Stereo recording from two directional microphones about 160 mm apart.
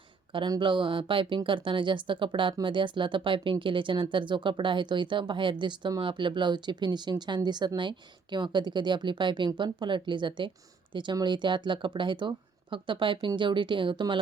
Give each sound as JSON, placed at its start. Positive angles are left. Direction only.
{"t": 0.3, "sound": "speech", "side_deg": -30}